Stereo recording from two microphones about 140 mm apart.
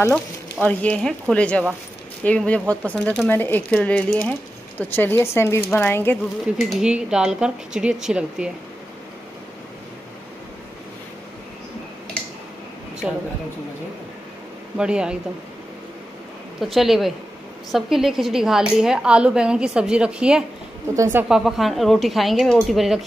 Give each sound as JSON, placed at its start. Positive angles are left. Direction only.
{"t": 0.1, "sound": "speech", "side_deg": 10}
{"t": 6.6, "sound": "speech", "side_deg": -5}
{"t": 13.0, "sound": "speech", "side_deg": -5}
{"t": 14.8, "sound": "speech", "side_deg": -5}
{"t": 16.5, "sound": "speech", "side_deg": 0}
{"t": 20.9, "sound": "a woman's voice", "side_deg": -20}
{"t": 21.3, "sound": "speech", "side_deg": 0}